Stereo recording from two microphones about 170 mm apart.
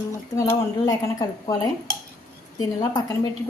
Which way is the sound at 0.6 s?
20° left (ahead or behind).